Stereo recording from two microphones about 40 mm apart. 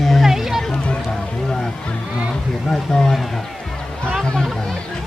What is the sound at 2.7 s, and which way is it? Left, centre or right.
Speech, centre.